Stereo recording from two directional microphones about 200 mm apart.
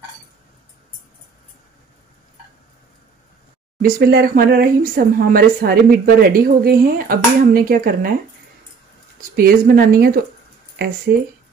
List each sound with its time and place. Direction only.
3.8 s speech: 50° right (ahead or behind)
9.3 s speech: 50° right (ahead or behind)